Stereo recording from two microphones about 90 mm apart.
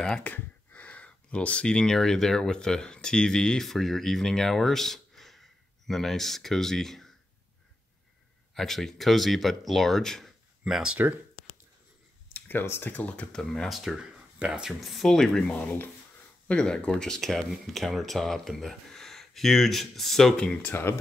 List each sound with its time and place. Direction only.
0.0 s speech: 10° left (ahead or behind)
8.5 s speech: 5° left (ahead or behind)
10.6 s speech: 10° right (ahead or behind)
12.3 s speech: 20° left (ahead or behind); by 20.4 s 5° left (ahead or behind)
20.7 s speech: 25° left (ahead or behind)